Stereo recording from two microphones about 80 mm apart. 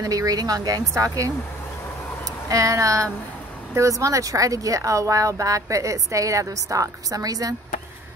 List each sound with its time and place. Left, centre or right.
0.0 s speech: right
2.5 s speech: right